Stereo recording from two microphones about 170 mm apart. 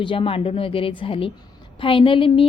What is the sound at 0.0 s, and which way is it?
A woman's voice, 30° left (ahead or behind).